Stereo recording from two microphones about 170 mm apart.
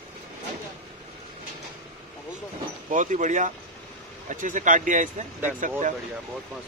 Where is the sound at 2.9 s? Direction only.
45° right (ahead or behind).